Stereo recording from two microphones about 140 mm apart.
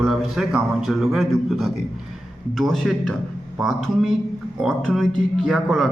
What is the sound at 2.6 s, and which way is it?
Speech, 5° left (ahead or behind).